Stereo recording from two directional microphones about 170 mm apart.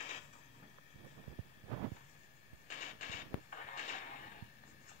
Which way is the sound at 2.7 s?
50° left (ahead or behind).